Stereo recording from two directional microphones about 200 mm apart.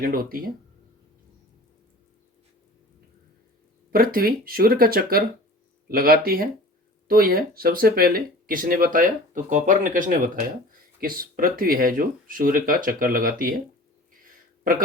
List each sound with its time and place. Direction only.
0.0 s speech: 45° right (ahead or behind)
3.9 s speech: 45° right (ahead or behind)